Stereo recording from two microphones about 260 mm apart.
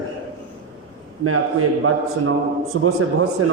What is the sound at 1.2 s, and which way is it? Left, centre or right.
A man's voice, right.